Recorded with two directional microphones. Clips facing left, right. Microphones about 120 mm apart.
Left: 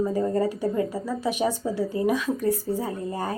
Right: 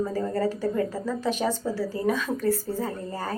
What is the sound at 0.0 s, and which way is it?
Speech, 15° left (ahead or behind).